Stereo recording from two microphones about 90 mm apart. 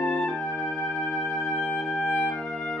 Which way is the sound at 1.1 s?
5° left (ahead or behind).